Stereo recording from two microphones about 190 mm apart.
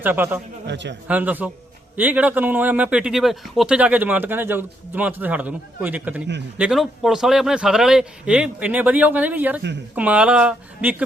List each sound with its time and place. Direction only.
0.0 s a man's voice: 10° right (ahead or behind)
0.7 s a man's voice: 65° right (ahead or behind)
1.0 s a man's voice: 10° right (ahead or behind)